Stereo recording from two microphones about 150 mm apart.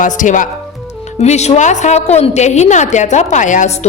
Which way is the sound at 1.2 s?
45° left (ahead or behind).